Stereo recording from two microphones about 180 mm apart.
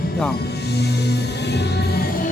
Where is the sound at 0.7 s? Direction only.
65° left (ahead or behind).